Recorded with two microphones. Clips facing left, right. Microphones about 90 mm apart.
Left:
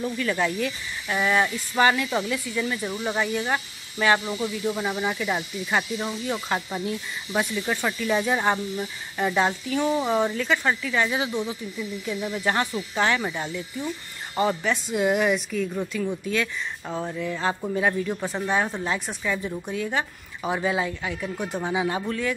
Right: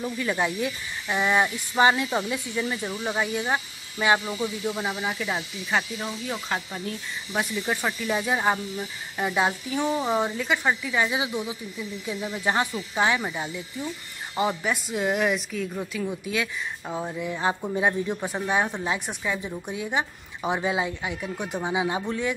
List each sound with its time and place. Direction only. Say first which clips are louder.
0.0 s speech: left 1 dB; 15° right (ahead or behind)
2.9 s speech: left 1 dB; 5° left (ahead or behind)
3.2 s speech: even; 15° right (ahead or behind)
4.9 s speech: left 3 dB; centre (ahead or behind)
7.3 s speech: left 2 dB; 10° right (ahead or behind)